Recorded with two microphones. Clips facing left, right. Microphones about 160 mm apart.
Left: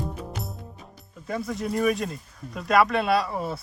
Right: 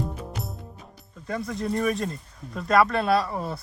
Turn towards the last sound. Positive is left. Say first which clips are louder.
# even
turn(degrees=0)  # may be behind; listen again after turning